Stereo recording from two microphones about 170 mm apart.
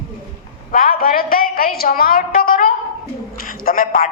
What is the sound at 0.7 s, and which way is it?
A woman's voice, 60° left (ahead or behind).